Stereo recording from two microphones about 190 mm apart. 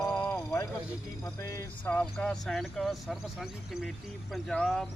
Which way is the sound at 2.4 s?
Centre (ahead or behind).